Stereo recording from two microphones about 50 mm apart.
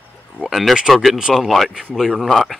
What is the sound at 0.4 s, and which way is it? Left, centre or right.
Speech, centre.